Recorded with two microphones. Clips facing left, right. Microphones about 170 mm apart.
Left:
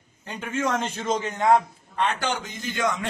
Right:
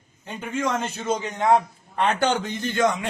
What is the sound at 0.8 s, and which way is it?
Speech, 10° right (ahead or behind).